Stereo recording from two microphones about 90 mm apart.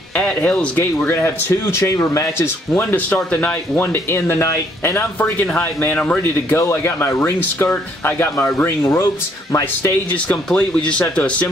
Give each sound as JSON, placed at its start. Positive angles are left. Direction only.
{"t": 0.1, "sound": "speech", "side_deg": 15}
{"t": 3.8, "sound": "speech", "side_deg": 25}
{"t": 6.5, "sound": "speech", "side_deg": 30}
{"t": 10.1, "sound": "speech", "side_deg": 15}